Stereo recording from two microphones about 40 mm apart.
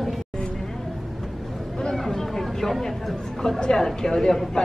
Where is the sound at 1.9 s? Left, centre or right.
Centre.